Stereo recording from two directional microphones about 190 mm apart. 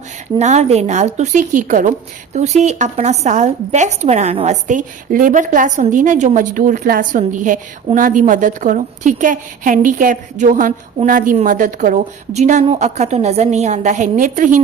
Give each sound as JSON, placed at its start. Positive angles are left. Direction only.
{"t": 0.3, "sound": "a woman's voice", "side_deg": -35}